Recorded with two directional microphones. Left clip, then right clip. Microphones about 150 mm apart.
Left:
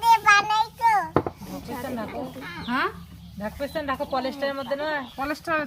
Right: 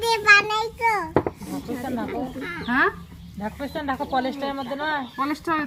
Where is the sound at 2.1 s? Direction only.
15° left (ahead or behind).